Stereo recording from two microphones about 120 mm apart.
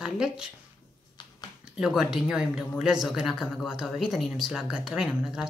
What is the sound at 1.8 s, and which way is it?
Speech, 5° right (ahead or behind).